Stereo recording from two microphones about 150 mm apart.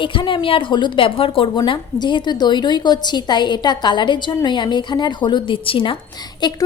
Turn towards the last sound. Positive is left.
turn(degrees=30)  # may be behind; listen again after turning